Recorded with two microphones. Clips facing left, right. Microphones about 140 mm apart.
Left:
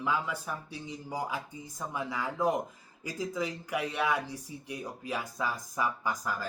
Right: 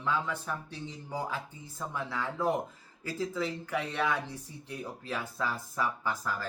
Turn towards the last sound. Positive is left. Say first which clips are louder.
# even
turn(degrees=15)  # may be behind; listen again after turning